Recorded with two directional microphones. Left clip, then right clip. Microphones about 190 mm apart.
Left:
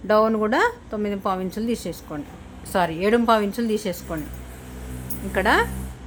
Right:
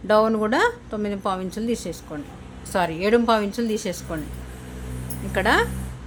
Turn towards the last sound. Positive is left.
turn(degrees=5)  # may be behind; listen again after turning